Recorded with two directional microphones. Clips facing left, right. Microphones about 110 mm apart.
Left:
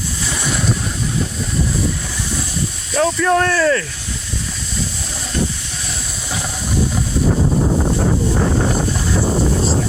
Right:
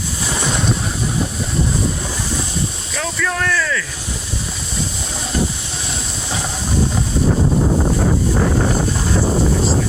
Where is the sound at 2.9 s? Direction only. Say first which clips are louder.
Left 9 dB; 35° left (ahead or behind).